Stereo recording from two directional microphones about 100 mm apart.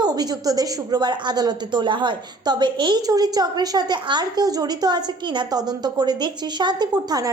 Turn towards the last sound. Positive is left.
turn(degrees=-40)  # may be behind; listen again after turning